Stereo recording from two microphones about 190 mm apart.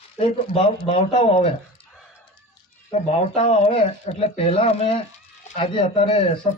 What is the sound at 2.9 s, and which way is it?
Speech, 30° left (ahead or behind).